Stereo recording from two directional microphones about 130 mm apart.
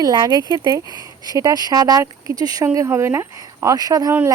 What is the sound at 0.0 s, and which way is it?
Speech, 30° right (ahead or behind).